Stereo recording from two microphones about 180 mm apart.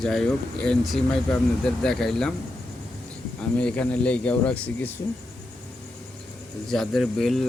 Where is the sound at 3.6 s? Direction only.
5° left (ahead or behind).